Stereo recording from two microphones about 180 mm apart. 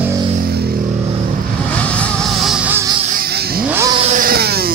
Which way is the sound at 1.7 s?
5° left (ahead or behind).